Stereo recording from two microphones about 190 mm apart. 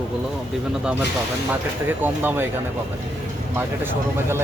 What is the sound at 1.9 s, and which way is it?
Speech, 10° right (ahead or behind).